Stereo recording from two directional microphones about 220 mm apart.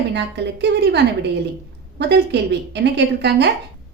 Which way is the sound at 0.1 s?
50° right (ahead or behind).